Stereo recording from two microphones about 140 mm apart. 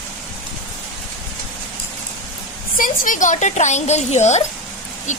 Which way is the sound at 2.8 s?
70° left (ahead or behind).